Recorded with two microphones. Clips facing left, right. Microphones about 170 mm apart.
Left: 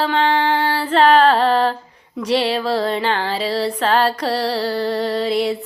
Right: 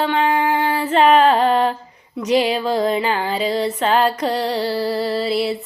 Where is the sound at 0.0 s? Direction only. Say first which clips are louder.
Even; 5° right (ahead or behind).